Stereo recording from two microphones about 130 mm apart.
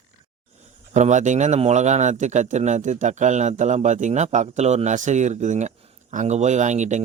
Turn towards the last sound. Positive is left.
turn(degrees=-65)  # may be behind; listen again after turning